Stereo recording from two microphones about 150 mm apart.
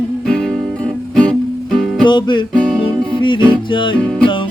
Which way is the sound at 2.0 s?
30° left (ahead or behind).